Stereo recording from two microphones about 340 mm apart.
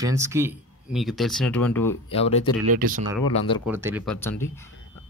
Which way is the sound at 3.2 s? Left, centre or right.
Centre.